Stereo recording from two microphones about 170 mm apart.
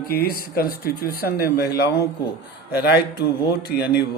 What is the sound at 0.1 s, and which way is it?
A man's voice, 60° left (ahead or behind).